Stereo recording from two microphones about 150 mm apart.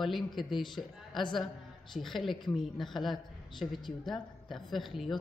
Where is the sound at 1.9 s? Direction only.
Centre (ahead or behind).